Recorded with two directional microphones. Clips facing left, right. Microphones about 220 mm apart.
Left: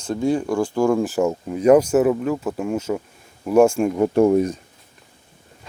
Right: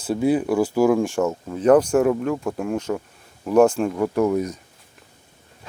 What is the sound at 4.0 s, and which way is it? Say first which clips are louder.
Speech: left 5 dB; 30° left (ahead or behind).